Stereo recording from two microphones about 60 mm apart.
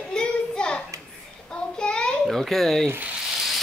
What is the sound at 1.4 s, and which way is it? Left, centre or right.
Child singing, centre.